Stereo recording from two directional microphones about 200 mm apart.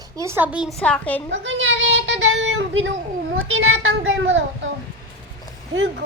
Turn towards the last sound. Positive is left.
turn(degrees=-70)  # may be behind; listen again after turning